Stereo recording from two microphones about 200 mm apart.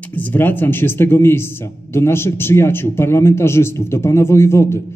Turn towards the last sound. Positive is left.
turn(degrees=15)  # may be behind; listen again after turning